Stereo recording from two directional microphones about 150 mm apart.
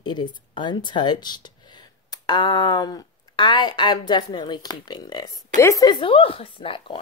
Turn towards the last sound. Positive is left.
turn(degrees=35)  # may be behind; listen again after turning